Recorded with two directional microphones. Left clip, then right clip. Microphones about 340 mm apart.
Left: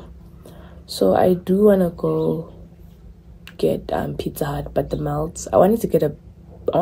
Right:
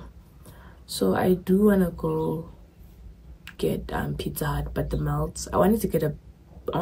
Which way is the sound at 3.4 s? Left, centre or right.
Centre.